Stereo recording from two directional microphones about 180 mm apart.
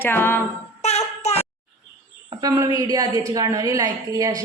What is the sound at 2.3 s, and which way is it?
A woman's voice, 20° right (ahead or behind).